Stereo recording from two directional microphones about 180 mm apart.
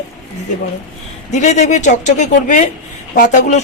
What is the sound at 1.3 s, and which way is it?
A man's voice, 40° left (ahead or behind).